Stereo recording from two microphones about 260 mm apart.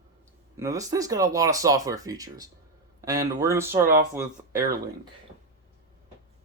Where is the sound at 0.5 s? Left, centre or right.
Centre.